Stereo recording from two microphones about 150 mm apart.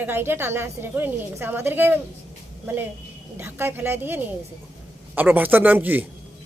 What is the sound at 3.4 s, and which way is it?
A woman's voice, 15° right (ahead or behind).